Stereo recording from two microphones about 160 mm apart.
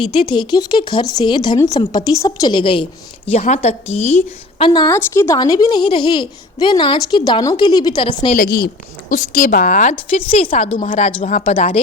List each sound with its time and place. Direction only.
0.1 s a woman's voice: 30° left (ahead or behind)
3.2 s a woman's voice: 45° left (ahead or behind)
4.7 s a woman's voice: 25° left (ahead or behind)
4.9 s a woman's voice: 15° left (ahead or behind)
8.3 s a woman's voice: 60° left (ahead or behind)
9.9 s a woman's voice: 35° left (ahead or behind)
10.5 s speech: 50° left (ahead or behind)